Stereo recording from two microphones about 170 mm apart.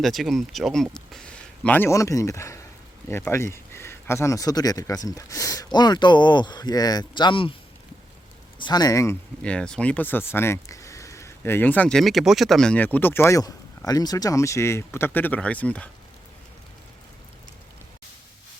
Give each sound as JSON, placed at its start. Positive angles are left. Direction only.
{"t": 0.0, "sound": "speech", "side_deg": 0}
{"t": 8.5, "sound": "speech", "side_deg": 25}
{"t": 9.4, "sound": "speech", "side_deg": 5}